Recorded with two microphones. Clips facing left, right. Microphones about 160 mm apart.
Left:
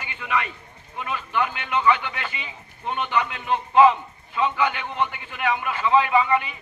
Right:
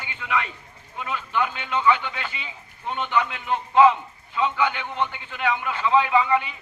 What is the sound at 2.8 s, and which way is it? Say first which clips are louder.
A man's voice: even; 15° left (ahead or behind).